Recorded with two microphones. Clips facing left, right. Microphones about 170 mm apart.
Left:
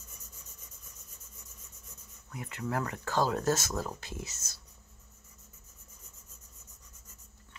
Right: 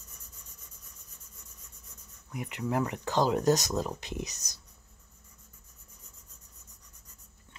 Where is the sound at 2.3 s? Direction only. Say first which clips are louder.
Right 3 dB; 15° right (ahead or behind).